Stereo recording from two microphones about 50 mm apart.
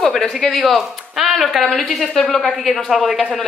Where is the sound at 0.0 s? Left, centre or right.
Centre.